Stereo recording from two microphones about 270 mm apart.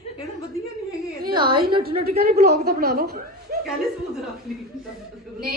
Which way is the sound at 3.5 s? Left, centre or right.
Right.